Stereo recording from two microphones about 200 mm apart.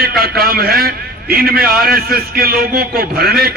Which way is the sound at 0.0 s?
50° right (ahead or behind).